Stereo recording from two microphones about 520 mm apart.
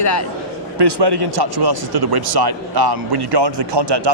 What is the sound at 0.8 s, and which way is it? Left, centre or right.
Speech, right.